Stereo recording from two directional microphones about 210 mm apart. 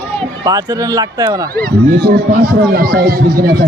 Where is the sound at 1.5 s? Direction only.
50° right (ahead or behind).